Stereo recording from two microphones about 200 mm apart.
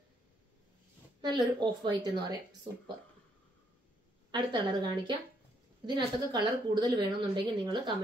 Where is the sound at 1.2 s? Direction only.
20° right (ahead or behind).